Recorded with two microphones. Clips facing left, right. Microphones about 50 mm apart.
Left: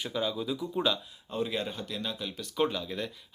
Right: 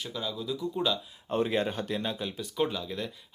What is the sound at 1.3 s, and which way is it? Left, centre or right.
Speech, right.